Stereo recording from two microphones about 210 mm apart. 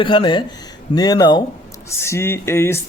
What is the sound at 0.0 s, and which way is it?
Speech, 25° left (ahead or behind).